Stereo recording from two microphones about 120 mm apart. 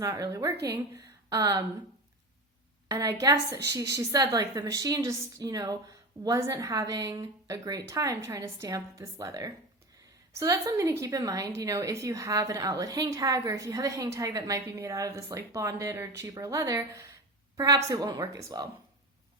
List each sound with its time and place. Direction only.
0.0 s a woman's voice: 30° right (ahead or behind)
2.9 s a woman's voice: 30° right (ahead or behind)